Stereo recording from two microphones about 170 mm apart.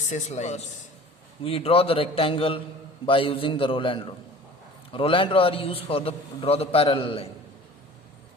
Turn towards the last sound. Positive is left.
turn(degrees=35)  # may be behind; listen again after turning